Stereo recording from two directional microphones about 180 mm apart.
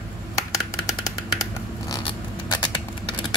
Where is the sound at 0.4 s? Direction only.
20° left (ahead or behind).